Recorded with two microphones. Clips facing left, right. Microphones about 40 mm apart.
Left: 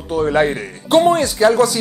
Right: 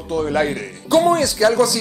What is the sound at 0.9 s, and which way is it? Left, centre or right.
Speech, left.